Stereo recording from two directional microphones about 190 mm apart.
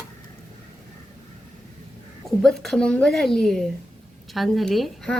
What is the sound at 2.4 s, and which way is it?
Speech, centre (ahead or behind).